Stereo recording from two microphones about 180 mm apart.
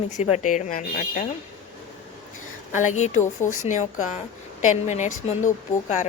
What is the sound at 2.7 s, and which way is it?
Speech, 45° left (ahead or behind).